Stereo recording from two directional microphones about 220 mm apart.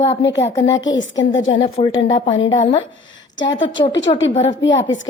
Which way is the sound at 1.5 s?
20° left (ahead or behind).